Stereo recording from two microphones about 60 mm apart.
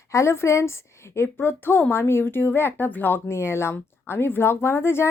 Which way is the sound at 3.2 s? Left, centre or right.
Left.